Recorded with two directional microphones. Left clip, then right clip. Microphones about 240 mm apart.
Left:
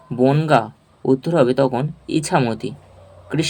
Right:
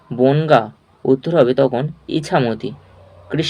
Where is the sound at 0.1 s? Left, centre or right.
Centre.